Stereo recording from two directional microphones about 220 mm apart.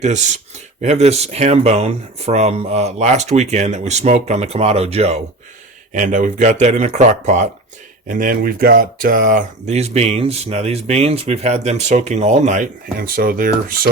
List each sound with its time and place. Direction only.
0.0 s speech: 30° right (ahead or behind)